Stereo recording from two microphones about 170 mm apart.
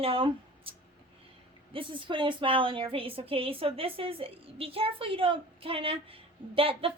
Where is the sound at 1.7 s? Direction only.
30° right (ahead or behind).